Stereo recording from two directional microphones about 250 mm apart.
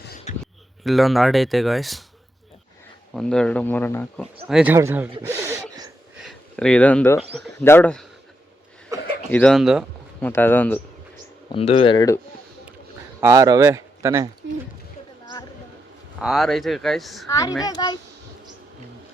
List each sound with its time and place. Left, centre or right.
0.3 s a sound: left
0.9 s speech: centre
3.2 s speech: centre
4.4 s speech: centre
6.2 s speech: centre
8.9 s a sound: centre
9.3 s speech: centre
11.5 s speech: left
13.1 s speech: centre
16.2 s speech: centre
17.2 s speech: centre